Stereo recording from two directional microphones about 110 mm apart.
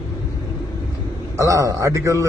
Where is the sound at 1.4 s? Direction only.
30° right (ahead or behind).